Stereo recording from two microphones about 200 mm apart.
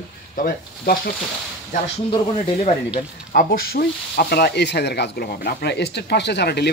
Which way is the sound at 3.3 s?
45° left (ahead or behind).